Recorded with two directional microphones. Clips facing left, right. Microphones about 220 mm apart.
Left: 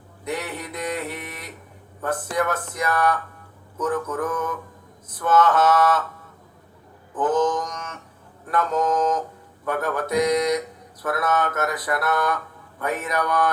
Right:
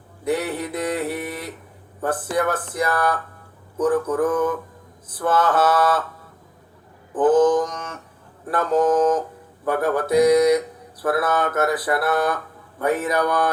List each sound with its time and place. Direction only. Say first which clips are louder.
0.3 s speech: right 6 dB; 30° right (ahead or behind)
7.1 s speech: right 6 dB; 30° right (ahead or behind)